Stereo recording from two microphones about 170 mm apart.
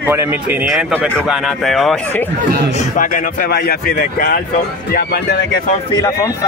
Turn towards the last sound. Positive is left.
turn(degrees=20)  # may be behind; listen again after turning